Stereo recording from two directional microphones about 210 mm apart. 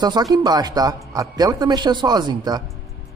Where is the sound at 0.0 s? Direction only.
20° right (ahead or behind).